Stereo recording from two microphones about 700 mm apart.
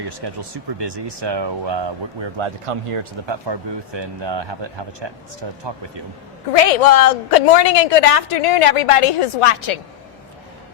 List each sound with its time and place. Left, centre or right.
0.0 s speech: right
6.5 s a woman's voice: left